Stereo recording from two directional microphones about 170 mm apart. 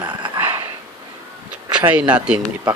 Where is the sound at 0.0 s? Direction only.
25° right (ahead or behind).